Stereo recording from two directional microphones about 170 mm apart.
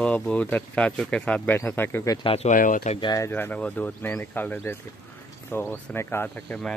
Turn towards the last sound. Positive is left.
turn(degrees=5)  # may be behind; listen again after turning